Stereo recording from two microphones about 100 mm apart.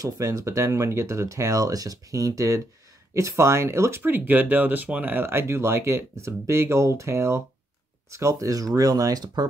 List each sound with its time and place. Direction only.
0.0 s speech: 30° right (ahead or behind)